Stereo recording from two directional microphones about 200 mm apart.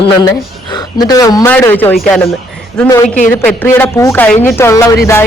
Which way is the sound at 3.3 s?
10° left (ahead or behind).